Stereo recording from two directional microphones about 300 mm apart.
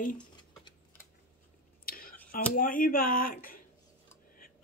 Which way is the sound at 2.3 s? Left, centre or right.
Left.